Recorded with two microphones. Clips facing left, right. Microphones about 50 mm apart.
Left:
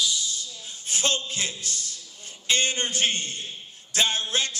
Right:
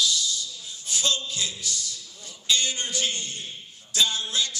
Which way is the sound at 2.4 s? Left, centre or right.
Left.